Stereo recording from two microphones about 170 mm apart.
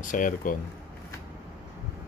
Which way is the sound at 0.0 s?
50° left (ahead or behind).